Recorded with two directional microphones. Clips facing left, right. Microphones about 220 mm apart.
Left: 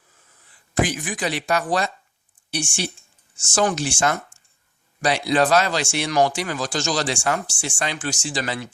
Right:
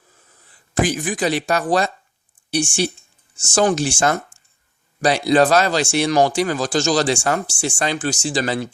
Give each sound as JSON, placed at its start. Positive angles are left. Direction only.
{"t": 0.8, "sound": "speech", "side_deg": -35}